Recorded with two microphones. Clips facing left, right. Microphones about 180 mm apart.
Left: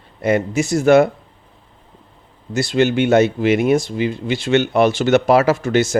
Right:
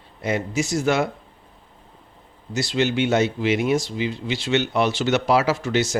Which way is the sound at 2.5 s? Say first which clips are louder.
Left 6 dB; 50° left (ahead or behind).